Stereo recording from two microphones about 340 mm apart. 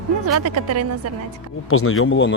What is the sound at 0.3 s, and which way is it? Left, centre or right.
Speech, right.